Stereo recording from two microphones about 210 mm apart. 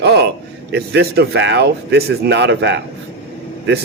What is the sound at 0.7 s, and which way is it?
Speech, 50° right (ahead or behind).